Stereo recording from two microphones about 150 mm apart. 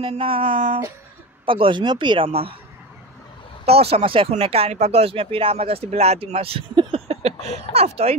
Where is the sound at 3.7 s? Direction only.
40° right (ahead or behind).